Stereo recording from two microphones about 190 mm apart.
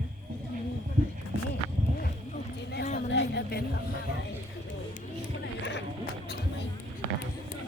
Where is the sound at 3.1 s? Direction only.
65° left (ahead or behind).